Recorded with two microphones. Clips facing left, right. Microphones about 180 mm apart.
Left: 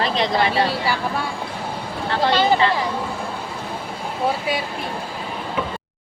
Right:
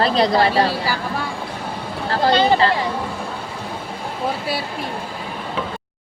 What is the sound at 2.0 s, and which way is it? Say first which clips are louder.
Speech: right 2 dB; 35° right (ahead or behind).